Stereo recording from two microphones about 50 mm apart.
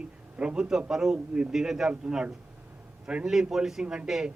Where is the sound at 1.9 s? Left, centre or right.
Right.